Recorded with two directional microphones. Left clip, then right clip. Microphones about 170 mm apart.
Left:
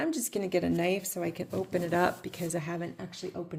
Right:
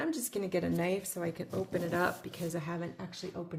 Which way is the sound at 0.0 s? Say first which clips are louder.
Left 3 dB; 45° left (ahead or behind).